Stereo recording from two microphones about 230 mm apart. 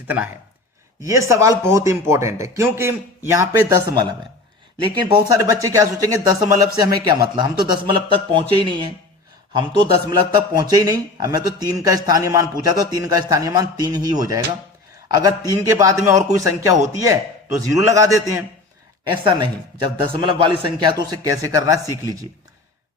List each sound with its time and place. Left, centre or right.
1.0 s a man's voice: centre
4.9 s a man's voice: centre